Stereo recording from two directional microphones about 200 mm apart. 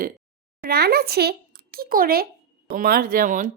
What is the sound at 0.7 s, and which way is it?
Speech, 50° right (ahead or behind).